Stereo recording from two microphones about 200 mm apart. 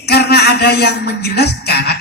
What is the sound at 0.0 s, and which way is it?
A man's voice, 55° left (ahead or behind).